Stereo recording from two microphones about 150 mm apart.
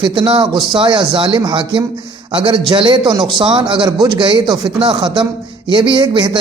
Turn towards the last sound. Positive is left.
turn(degrees=-30)  # may be behind; listen again after turning